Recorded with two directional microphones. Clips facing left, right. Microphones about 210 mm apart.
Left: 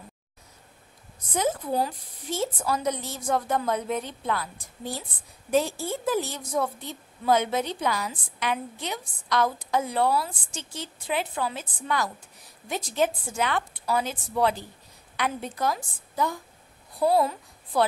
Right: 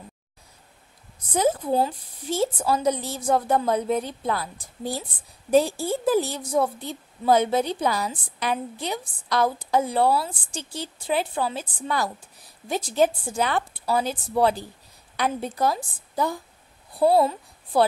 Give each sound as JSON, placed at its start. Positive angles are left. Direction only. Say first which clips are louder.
{"t": 1.3, "sound": "a woman's voice", "louder": "right 4 dB", "side_deg": -30}